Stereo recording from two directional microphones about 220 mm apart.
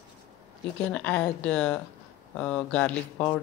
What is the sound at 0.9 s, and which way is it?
A woman's voice, 5° left (ahead or behind).